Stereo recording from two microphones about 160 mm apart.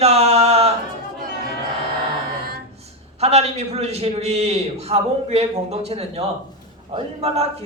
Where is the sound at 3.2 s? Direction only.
40° right (ahead or behind).